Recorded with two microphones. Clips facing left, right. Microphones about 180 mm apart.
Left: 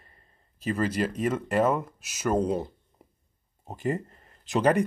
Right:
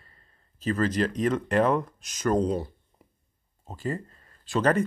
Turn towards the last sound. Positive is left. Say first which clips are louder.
# left 1 dB
turn(degrees=15)  # may be behind; listen again after turning